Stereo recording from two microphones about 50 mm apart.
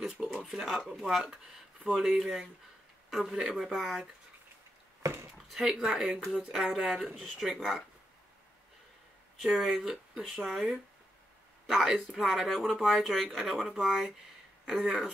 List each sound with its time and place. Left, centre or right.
0.3 s a sound: centre
0.7 s a man's voice: centre
5.0 s speech: right
5.5 s speech: centre
9.4 s speech: centre